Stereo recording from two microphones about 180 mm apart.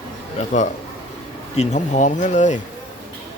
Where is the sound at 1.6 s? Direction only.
40° left (ahead or behind).